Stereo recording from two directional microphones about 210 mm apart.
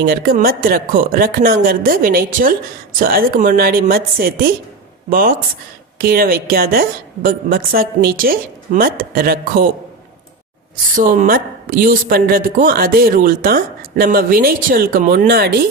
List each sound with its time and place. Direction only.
0.0 s a woman's voice: 45° right (ahead or behind)
10.9 s a woman's voice: 40° right (ahead or behind)